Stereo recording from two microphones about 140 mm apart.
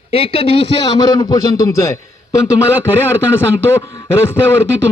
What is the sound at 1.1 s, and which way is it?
Speech, 25° left (ahead or behind).